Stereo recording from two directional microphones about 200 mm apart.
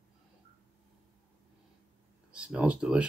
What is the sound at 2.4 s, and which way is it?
Speech, 5° right (ahead or behind).